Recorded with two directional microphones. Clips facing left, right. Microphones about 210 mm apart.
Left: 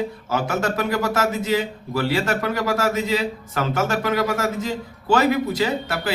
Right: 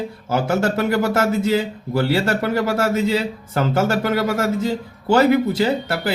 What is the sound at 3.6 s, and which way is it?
Speech, 30° right (ahead or behind).